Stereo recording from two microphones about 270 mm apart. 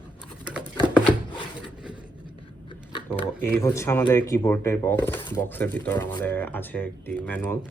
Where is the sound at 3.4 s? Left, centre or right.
Centre.